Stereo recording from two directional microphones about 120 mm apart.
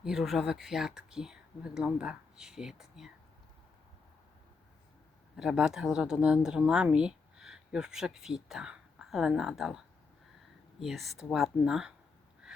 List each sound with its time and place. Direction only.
0.0 s speech: centre (ahead or behind)
5.4 s speech: 5° right (ahead or behind)